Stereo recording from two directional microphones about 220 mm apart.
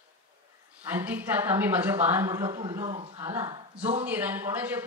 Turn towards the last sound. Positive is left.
turn(degrees=-10)  # may be behind; listen again after turning